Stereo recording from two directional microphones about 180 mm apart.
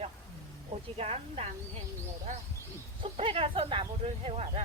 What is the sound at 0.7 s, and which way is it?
Speech, 35° right (ahead or behind).